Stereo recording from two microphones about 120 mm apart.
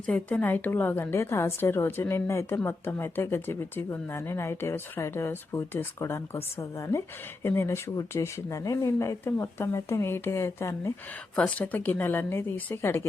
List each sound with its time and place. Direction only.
0.0 s speech: 10° left (ahead or behind)
11.3 s speech: 10° left (ahead or behind)